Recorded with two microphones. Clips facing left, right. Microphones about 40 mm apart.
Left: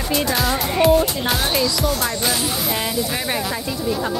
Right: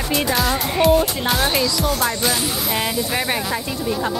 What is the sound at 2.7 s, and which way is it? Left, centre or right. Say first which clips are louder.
Speech: right 1 dB; centre.